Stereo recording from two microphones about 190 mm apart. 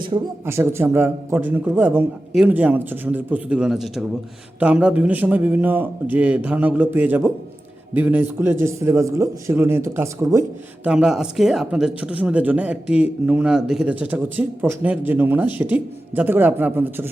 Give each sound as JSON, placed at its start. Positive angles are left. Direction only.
{"t": 0.1, "sound": "a man's voice", "side_deg": -25}
{"t": 0.4, "sound": "speech", "side_deg": -15}
{"t": 10.8, "sound": "speech", "side_deg": -5}